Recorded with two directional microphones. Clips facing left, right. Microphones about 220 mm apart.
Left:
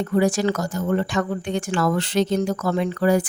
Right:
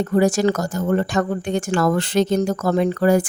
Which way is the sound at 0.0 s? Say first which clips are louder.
Right 3 dB; 45° right (ahead or behind).